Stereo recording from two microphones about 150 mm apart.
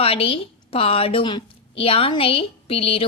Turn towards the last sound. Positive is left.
turn(degrees=40)  # may be behind; listen again after turning